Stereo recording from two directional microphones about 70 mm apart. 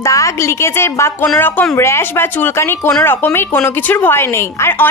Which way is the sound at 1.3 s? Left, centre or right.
Left.